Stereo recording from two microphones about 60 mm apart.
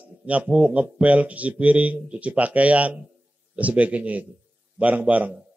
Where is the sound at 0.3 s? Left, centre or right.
Right.